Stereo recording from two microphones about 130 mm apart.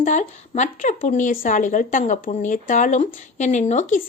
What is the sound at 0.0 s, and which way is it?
Speech, 70° left (ahead or behind).